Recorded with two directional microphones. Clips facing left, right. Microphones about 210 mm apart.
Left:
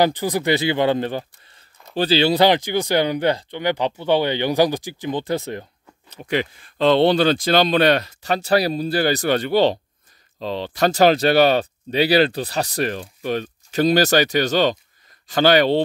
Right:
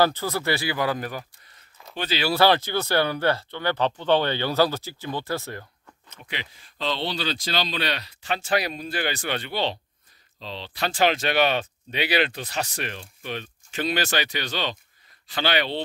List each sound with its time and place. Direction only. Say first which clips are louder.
0.0 s speech: left 4 dB; 15° left (ahead or behind)
6.0 s speech: left 10 dB; 35° left (ahead or behind)
6.3 s speech: left 14 dB; 50° left (ahead or behind)